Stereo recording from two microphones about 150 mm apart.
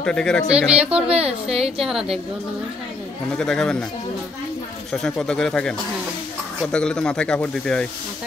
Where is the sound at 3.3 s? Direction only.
5° left (ahead or behind).